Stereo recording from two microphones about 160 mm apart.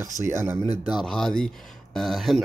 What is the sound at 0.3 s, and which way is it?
Speech, 15° right (ahead or behind).